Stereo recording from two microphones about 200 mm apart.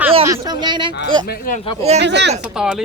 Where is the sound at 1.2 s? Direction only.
50° left (ahead or behind).